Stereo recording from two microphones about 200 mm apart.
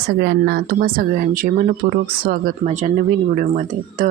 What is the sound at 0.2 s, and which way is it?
Speech, 55° right (ahead or behind).